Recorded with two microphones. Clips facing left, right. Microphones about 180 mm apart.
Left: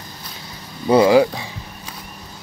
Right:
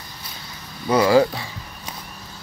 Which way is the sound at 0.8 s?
20° left (ahead or behind).